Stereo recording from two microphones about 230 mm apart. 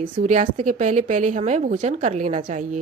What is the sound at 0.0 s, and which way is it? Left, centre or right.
A woman's voice, right.